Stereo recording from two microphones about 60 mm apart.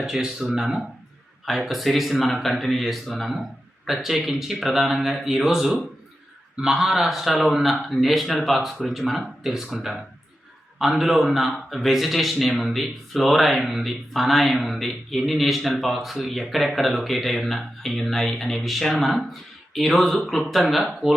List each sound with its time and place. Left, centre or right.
0.0 s speech: centre